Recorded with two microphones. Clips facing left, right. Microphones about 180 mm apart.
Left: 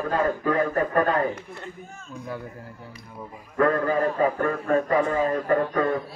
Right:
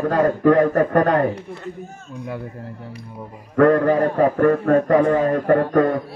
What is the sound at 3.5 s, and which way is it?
A man's voice, 70° right (ahead or behind).